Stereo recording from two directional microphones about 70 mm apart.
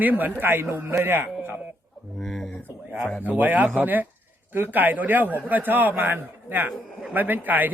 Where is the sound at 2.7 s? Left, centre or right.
Right.